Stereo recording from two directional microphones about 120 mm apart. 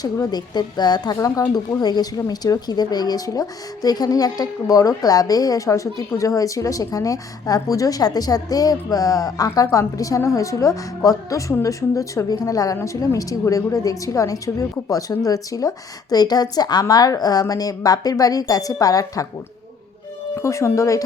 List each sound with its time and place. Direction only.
0.0 s a woman's voice: 35° left (ahead or behind)
20.3 s a woman's voice: 25° left (ahead or behind)